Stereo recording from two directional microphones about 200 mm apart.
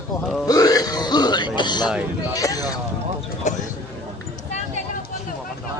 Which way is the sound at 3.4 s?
35° left (ahead or behind).